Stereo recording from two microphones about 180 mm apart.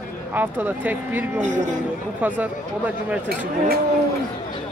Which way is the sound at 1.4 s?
45° right (ahead or behind).